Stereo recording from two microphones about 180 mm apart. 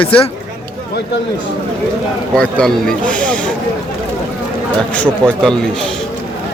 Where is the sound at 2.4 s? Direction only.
5° left (ahead or behind).